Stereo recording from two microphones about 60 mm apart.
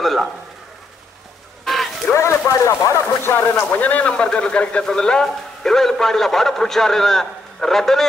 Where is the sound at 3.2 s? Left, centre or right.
Left.